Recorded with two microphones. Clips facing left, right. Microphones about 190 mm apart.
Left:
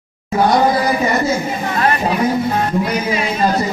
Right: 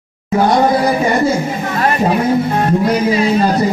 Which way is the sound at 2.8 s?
35° right (ahead or behind).